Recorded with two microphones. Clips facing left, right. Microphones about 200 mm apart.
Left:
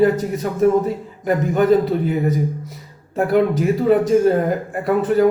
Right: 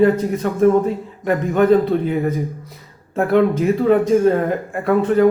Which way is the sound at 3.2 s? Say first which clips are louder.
Right 1 dB; centre (ahead or behind).